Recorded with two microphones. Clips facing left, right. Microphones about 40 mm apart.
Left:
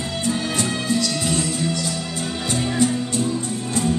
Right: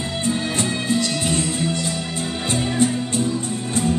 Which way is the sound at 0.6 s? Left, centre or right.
Right.